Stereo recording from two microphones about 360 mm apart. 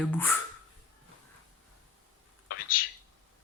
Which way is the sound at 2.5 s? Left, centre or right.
Left.